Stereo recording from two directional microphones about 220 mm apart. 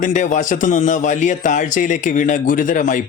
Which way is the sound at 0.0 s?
35° left (ahead or behind).